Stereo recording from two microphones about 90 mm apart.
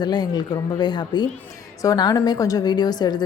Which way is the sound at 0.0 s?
50° left (ahead or behind).